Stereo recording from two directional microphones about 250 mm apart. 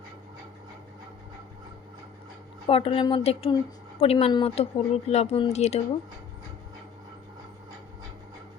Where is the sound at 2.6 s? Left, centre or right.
Left.